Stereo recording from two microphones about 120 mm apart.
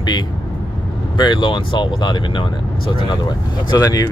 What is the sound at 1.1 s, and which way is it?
Speech, 40° left (ahead or behind).